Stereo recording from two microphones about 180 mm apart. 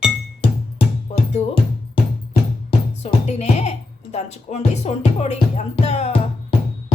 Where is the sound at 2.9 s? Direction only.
35° left (ahead or behind).